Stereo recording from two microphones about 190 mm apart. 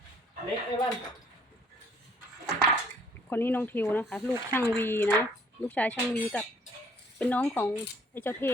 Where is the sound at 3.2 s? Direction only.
10° left (ahead or behind).